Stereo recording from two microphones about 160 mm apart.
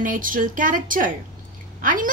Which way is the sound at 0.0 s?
55° right (ahead or behind).